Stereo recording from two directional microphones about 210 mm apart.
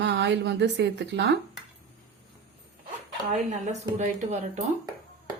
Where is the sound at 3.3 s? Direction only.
35° right (ahead or behind).